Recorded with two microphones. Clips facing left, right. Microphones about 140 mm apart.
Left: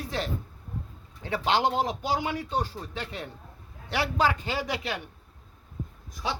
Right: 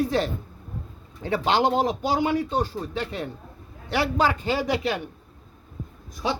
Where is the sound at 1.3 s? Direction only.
50° right (ahead or behind).